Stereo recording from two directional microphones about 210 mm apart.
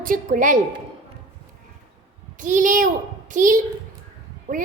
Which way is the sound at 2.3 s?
40° right (ahead or behind).